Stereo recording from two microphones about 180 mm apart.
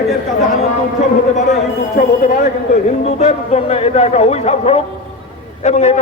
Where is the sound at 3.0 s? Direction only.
35° left (ahead or behind).